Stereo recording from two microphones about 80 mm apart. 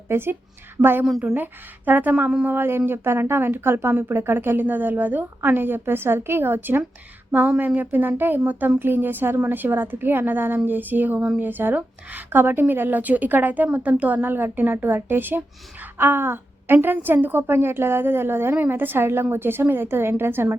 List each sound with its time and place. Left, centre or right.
0.1 s speech: right